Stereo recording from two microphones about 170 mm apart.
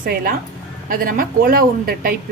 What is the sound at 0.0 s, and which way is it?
A woman's voice, 60° right (ahead or behind).